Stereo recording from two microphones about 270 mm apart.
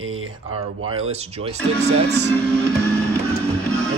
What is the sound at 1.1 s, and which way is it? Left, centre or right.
Speech, right.